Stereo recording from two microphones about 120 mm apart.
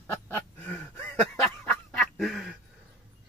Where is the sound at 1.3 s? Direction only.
5° left (ahead or behind).